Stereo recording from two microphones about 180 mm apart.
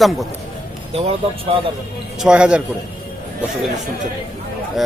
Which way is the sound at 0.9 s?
35° right (ahead or behind).